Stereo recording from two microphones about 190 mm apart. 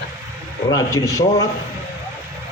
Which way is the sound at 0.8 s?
15° left (ahead or behind).